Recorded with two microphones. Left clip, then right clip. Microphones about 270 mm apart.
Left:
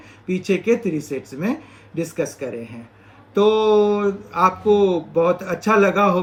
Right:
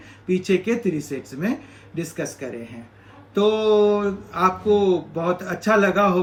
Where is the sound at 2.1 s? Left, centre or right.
Centre.